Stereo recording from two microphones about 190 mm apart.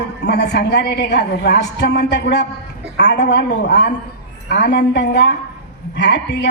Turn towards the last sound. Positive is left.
turn(degrees=60)  # may be behind; listen again after turning